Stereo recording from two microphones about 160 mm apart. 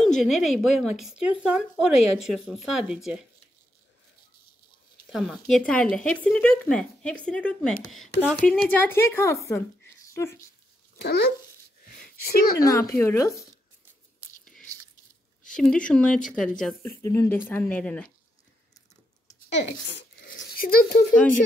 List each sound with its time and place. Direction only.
0.0 s speech: 5° left (ahead or behind)
5.1 s speech: centre (ahead or behind); by 9.6 s 20° left (ahead or behind)
10.0 s a sound: 20° left (ahead or behind)
11.0 s speech: 90° left
12.5 s speech: 20° left (ahead or behind)
15.5 s speech: 5° left (ahead or behind)
16.8 s speech: 15° left (ahead or behind)
19.9 s a sound: 90° left
20.4 s a child's voice: 65° left (ahead or behind)